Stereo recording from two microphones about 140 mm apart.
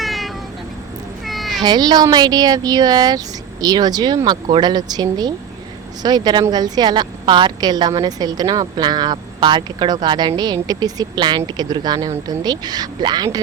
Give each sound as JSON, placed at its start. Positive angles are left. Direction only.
{"t": 0.0, "sound": "meow", "side_deg": 0}
{"t": 1.6, "sound": "a woman's voice", "side_deg": -30}